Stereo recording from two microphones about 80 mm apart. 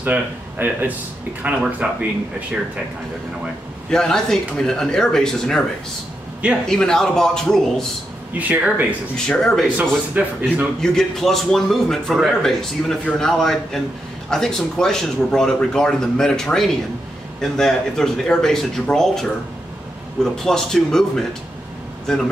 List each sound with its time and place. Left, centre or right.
0.0 s speech: right
3.9 s speech: centre
6.6 s speech: centre
8.3 s speech: centre
9.1 s speech: centre
10.2 s speech: centre
10.8 s a man's voice: centre
20.4 s speech: centre